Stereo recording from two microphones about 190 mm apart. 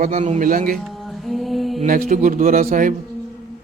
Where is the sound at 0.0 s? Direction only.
40° right (ahead or behind).